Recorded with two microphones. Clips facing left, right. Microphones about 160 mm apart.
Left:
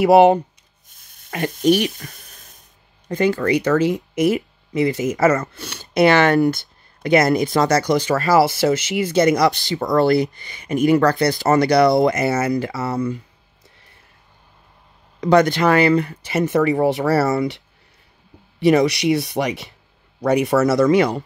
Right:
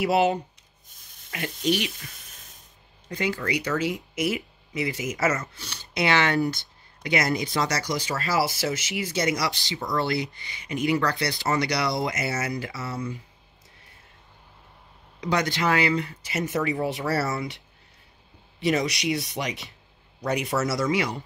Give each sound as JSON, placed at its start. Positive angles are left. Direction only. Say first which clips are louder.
{"t": 0.0, "sound": "speech", "louder": "left 10 dB", "side_deg": 65}
{"t": 1.3, "sound": "speech", "louder": "left 9 dB", "side_deg": 45}
{"t": 15.1, "sound": "speech", "louder": "left 11 dB", "side_deg": 55}
{"t": 18.6, "sound": "speech", "louder": "left 10 dB", "side_deg": 60}